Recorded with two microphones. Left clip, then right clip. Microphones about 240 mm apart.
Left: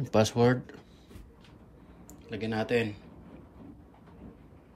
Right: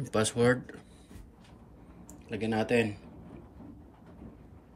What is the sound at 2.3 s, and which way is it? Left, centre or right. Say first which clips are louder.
Speech: even; centre.